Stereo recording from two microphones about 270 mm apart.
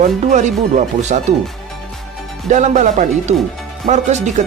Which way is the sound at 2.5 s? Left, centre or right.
Right.